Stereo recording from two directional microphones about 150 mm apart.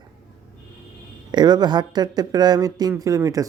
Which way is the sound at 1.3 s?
30° right (ahead or behind).